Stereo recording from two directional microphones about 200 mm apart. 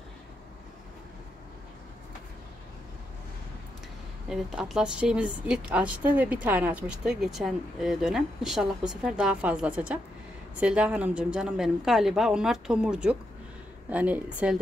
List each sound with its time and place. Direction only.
4.3 s a woman's voice: centre (ahead or behind)